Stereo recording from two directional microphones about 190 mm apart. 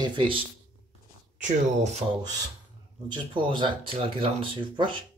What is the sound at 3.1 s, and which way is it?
Speech, 25° right (ahead or behind).